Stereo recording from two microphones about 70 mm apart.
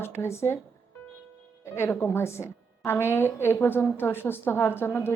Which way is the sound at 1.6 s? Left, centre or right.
Left.